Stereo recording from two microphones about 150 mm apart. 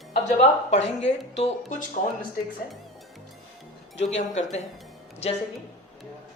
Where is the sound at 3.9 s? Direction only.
50° left (ahead or behind).